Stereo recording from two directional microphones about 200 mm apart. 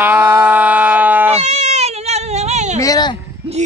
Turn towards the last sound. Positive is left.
turn(degrees=20)  # may be behind; listen again after turning